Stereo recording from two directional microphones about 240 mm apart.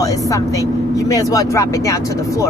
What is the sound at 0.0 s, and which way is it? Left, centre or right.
Speech, centre.